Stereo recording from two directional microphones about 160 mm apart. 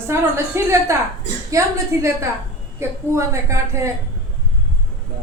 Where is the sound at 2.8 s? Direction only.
20° right (ahead or behind).